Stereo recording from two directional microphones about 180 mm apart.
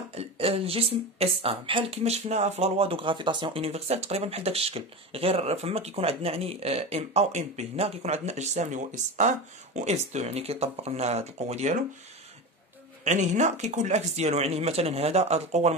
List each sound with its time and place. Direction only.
0.1 s speech: 35° right (ahead or behind)
13.0 s speech: 40° right (ahead or behind)